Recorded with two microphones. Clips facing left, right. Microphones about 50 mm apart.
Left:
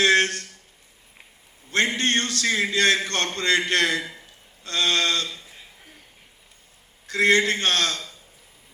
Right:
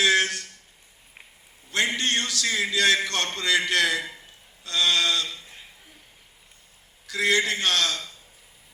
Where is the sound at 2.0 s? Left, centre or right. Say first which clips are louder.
Left 3 dB; left.